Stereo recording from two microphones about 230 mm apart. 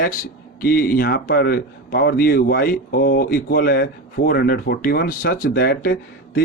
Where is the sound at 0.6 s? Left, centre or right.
Left.